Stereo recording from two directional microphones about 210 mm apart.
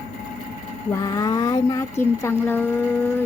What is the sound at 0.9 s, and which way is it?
Speech, 15° left (ahead or behind).